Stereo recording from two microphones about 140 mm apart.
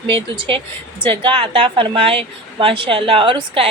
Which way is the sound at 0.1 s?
40° right (ahead or behind).